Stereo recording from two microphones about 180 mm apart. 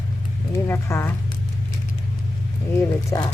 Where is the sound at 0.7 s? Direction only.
15° left (ahead or behind).